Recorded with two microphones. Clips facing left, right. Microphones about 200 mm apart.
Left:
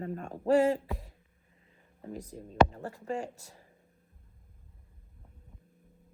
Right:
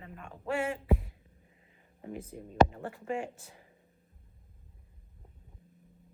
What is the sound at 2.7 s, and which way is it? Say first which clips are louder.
Speech: even; 40° left (ahead or behind).